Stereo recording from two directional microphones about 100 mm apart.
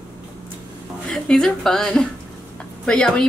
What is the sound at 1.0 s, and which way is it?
Speech, 5° left (ahead or behind).